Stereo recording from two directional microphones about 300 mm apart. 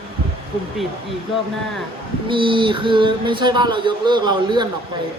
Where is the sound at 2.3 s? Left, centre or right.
Centre.